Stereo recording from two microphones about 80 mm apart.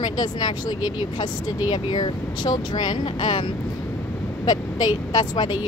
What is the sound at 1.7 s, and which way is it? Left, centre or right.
Speech, left.